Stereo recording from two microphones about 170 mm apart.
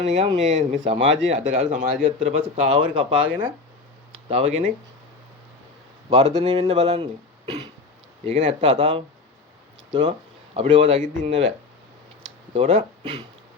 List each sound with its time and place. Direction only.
0.0 s speech: 40° right (ahead or behind)
0.9 s speech: 90° right
1.3 s speech: 40° right (ahead or behind)
2.1 s speech: 35° right (ahead or behind)
4.3 s speech: 35° right (ahead or behind)
6.1 s speech: 35° right (ahead or behind)
8.2 s speech: 40° right (ahead or behind)
8.7 s speech: 30° right (ahead or behind)
11.3 s speech: 90° right
12.5 s speech: 35° right (ahead or behind)